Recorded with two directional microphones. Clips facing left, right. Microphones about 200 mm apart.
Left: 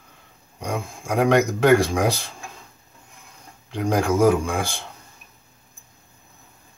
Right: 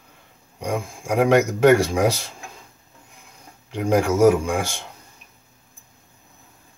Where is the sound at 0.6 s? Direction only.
10° right (ahead or behind).